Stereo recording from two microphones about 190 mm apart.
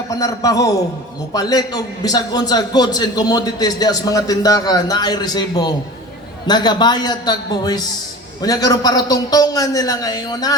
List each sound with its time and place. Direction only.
0.1 s a man's voice: 20° left (ahead or behind)